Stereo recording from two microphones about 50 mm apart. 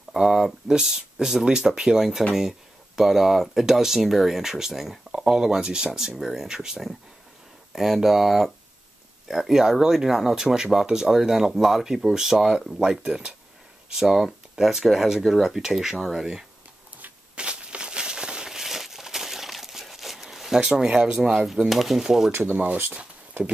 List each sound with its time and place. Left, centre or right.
0.1 s speech: centre
15.2 s speech: centre
15.5 s speech: centre
17.4 s a sound: right
21.6 s speech: centre
22.4 s speech: right